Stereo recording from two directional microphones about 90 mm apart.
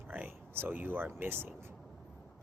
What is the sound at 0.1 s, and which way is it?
Speech, 20° right (ahead or behind).